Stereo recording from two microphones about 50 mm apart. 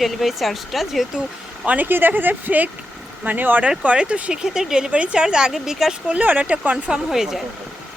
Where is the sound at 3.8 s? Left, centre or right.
Right.